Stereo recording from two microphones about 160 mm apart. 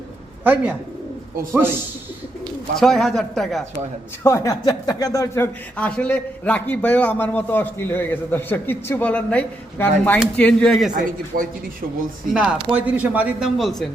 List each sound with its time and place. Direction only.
0.4 s a man's voice: 10° right (ahead or behind)
2.7 s a man's voice: centre (ahead or behind)
4.2 s a man's voice: 15° left (ahead or behind); by 10.9 s centre (ahead or behind)
11.3 s speech: 60° right (ahead or behind)
12.3 s a man's voice: 5° right (ahead or behind)